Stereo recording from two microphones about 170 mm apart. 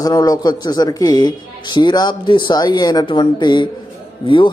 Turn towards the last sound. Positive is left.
turn(degrees=30)  # may be behind; listen again after turning